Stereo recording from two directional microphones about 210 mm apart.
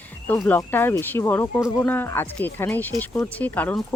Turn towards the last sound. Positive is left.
turn(degrees=10)  # may be behind; listen again after turning